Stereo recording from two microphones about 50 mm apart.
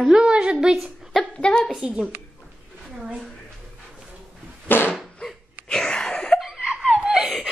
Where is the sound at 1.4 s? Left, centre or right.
Centre.